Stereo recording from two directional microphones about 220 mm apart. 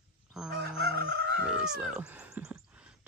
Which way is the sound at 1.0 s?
50° right (ahead or behind).